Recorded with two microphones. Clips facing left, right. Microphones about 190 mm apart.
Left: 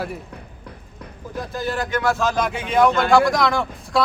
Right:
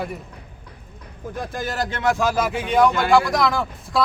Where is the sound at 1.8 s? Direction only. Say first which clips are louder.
Left 1 dB; 30° right (ahead or behind).